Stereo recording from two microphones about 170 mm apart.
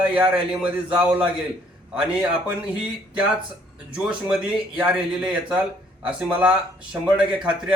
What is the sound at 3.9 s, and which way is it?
Speech, 5° right (ahead or behind).